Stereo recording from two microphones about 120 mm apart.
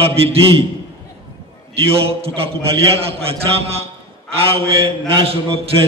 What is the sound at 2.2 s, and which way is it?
A man's voice, 55° right (ahead or behind).